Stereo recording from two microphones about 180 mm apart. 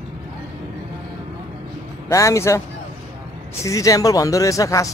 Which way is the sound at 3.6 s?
20° left (ahead or behind).